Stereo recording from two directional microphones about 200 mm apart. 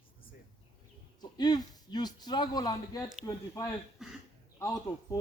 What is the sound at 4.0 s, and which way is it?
Speech, centre (ahead or behind).